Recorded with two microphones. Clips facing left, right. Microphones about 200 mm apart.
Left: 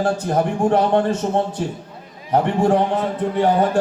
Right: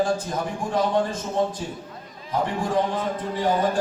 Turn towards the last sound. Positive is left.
turn(degrees=65)  # may be behind; listen again after turning